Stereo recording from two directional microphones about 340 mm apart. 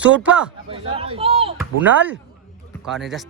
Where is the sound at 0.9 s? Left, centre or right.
Centre.